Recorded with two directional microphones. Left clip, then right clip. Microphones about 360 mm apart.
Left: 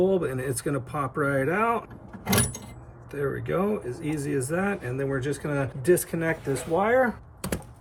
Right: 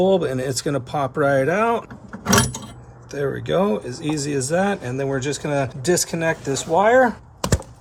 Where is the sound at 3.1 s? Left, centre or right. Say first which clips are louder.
Right 7 dB; centre.